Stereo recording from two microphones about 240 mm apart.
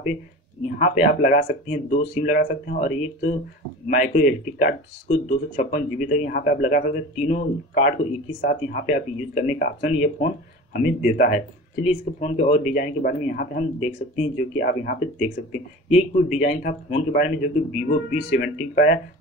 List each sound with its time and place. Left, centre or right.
1.0 s speech: left